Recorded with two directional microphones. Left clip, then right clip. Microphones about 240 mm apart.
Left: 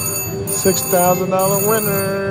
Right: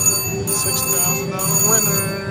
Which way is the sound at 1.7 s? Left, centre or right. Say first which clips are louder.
Left 2 dB; centre.